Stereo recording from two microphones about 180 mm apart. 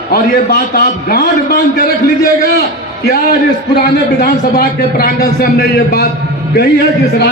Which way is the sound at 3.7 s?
60° left (ahead or behind).